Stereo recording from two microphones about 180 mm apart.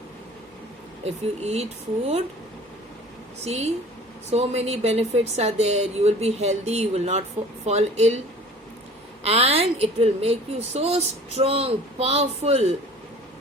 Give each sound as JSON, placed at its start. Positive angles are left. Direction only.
{"t": 1.0, "sound": "speech", "side_deg": -35}
{"t": 3.4, "sound": "speech", "side_deg": -35}
{"t": 9.2, "sound": "speech", "side_deg": -35}